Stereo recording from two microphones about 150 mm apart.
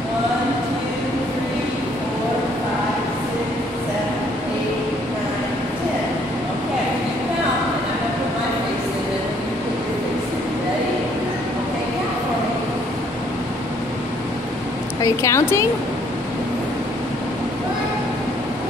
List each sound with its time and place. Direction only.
15.0 s a woman's voice: 20° left (ahead or behind)